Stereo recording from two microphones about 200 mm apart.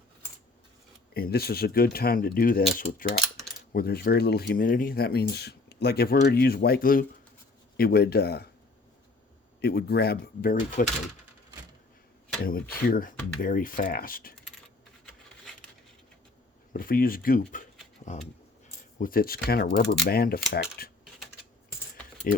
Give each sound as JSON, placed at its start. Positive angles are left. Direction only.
{"t": 1.1, "sound": "speech", "side_deg": 50}
{"t": 9.6, "sound": "speech", "side_deg": 50}
{"t": 12.4, "sound": "speech", "side_deg": 45}
{"t": 16.7, "sound": "speech", "side_deg": 45}
{"t": 18.9, "sound": "speech", "side_deg": 45}
{"t": 22.3, "sound": "speech", "side_deg": 45}